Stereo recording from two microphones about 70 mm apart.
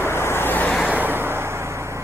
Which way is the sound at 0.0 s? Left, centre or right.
Left.